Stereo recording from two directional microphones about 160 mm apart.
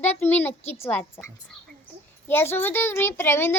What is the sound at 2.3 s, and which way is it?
A child's voice, 15° left (ahead or behind).